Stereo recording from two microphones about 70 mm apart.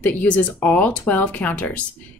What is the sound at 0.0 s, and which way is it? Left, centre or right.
A woman's voice, left.